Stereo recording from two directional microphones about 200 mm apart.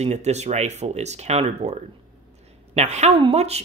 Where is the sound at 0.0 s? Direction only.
35° right (ahead or behind).